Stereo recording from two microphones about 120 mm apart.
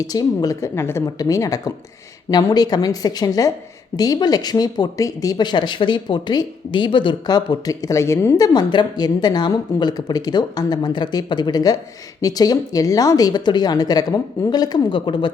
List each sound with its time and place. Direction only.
0.0 s a woman's voice: 30° left (ahead or behind)
8.5 s speech: 40° left (ahead or behind)